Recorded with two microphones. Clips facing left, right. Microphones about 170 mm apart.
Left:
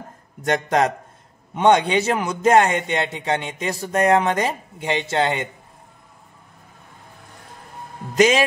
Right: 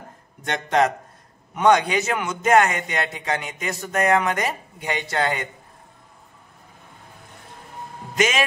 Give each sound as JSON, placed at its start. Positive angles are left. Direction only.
{"t": 0.4, "sound": "a man's voice", "side_deg": 40}
{"t": 1.5, "sound": "a man's voice", "side_deg": 25}
{"t": 8.2, "sound": "a man's voice", "side_deg": 35}